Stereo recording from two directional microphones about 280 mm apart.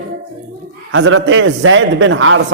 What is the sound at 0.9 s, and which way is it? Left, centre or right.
A man's voice, right.